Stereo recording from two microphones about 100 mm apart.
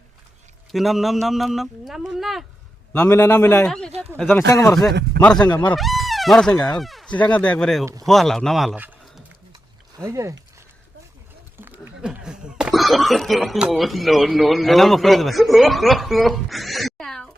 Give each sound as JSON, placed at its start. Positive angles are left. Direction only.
{"t": 0.7, "sound": "speech", "side_deg": 0}
{"t": 2.9, "sound": "a man's voice", "side_deg": 25}
{"t": 3.7, "sound": "speech", "side_deg": 5}
{"t": 4.4, "sound": "a man's voice", "side_deg": 25}
{"t": 4.7, "sound": "speech", "side_deg": 5}
{"t": 7.1, "sound": "speech", "side_deg": 15}
{"t": 10.0, "sound": "speech", "side_deg": -30}
{"t": 11.5, "sound": "a sound", "side_deg": -20}
{"t": 12.0, "sound": "speech", "side_deg": -5}